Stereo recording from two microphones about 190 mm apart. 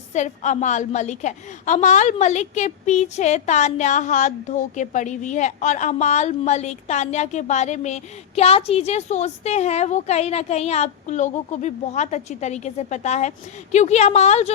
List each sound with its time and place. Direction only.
0.1 s a woman's voice: 40° left (ahead or behind)